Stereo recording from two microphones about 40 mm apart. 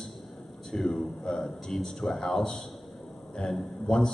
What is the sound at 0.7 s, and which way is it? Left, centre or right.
A man's voice, centre.